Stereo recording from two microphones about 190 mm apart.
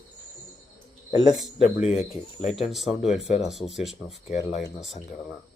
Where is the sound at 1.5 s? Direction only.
35° left (ahead or behind).